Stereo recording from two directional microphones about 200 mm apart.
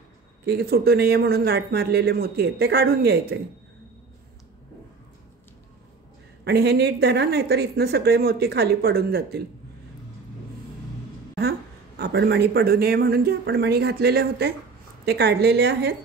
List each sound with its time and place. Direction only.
0.5 s speech: 50° right (ahead or behind)
6.4 s speech: 55° right (ahead or behind)
12.0 s a woman's voice: 60° right (ahead or behind)